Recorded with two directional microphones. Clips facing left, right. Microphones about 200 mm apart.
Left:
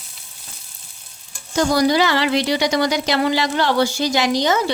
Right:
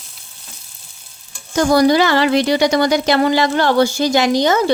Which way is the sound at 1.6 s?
55° right (ahead or behind).